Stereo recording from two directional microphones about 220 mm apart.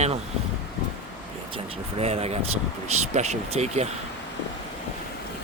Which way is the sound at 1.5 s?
25° right (ahead or behind).